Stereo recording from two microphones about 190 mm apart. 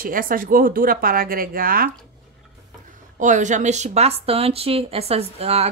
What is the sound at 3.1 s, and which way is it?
Speech, 40° right (ahead or behind).